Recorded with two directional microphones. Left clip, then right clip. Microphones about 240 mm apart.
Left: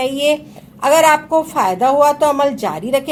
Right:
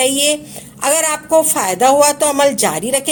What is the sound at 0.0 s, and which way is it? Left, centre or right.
A woman's voice, right.